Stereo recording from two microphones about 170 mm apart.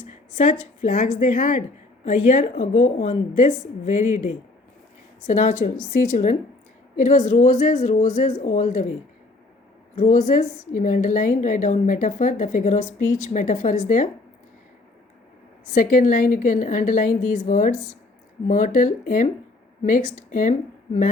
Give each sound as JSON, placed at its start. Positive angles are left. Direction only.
{"t": 0.1, "sound": "a woman's voice", "side_deg": 45}
{"t": 6.9, "sound": "a woman's voice", "side_deg": 50}
{"t": 9.9, "sound": "a woman's voice", "side_deg": 50}
{"t": 15.7, "sound": "a woman's voice", "side_deg": 50}